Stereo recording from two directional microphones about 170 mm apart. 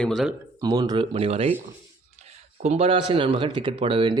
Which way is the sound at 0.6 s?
25° right (ahead or behind).